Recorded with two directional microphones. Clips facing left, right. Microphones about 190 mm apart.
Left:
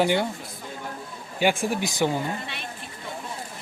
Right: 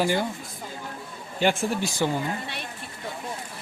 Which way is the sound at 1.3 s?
15° left (ahead or behind).